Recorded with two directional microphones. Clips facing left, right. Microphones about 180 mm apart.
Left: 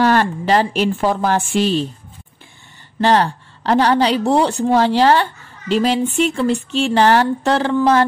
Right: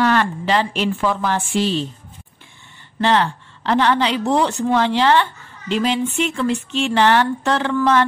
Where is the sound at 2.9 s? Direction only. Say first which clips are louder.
Left 3 dB; 40° left (ahead or behind).